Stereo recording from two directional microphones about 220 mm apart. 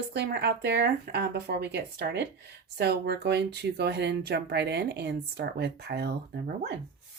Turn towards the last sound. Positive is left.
turn(degrees=-50)  # may be behind; listen again after turning